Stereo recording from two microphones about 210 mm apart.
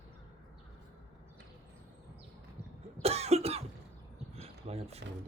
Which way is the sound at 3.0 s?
30° right (ahead or behind).